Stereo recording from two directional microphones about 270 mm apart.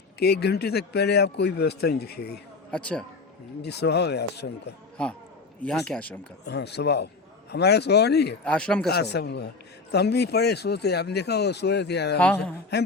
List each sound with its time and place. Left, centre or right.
0.2 s speech: left
2.7 s speech: centre
3.6 s speech: left
5.6 s speech: centre
6.4 s speech: left
8.4 s speech: centre
8.9 s speech: left
12.2 s speech: centre